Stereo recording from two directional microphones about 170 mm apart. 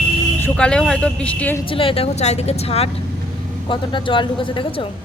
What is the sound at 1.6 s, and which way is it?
A woman's voice, 30° left (ahead or behind).